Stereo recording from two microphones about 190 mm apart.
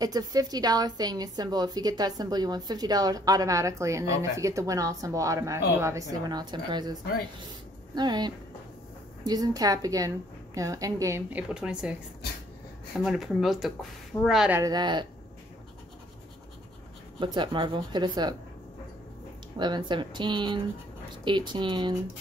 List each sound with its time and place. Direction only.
0.0 s a woman's voice: 20° right (ahead or behind)
13.0 s speech: centre (ahead or behind)
14.6 s a woman's voice: 20° right (ahead or behind)
17.2 s a woman's voice: 25° right (ahead or behind)
19.5 s a woman's voice: 25° right (ahead or behind)